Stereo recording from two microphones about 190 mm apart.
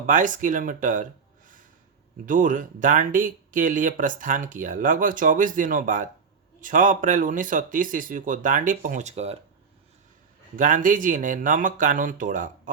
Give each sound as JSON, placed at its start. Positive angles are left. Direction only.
{"t": 0.0, "sound": "speech", "side_deg": -45}
{"t": 2.2, "sound": "speech", "side_deg": -45}
{"t": 10.6, "sound": "speech", "side_deg": -45}